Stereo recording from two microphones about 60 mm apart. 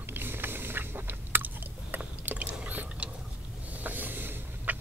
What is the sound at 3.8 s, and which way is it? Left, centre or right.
Vehicle, right.